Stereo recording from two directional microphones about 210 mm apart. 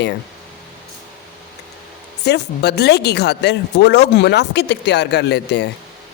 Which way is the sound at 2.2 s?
55° left (ahead or behind).